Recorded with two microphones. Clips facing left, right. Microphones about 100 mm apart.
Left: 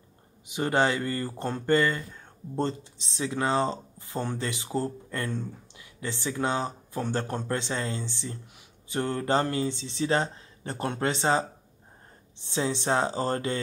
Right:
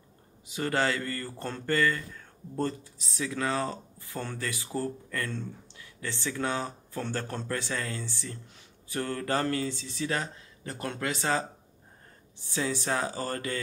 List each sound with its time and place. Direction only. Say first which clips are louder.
0.5 s speech: left 3 dB; 20° left (ahead or behind)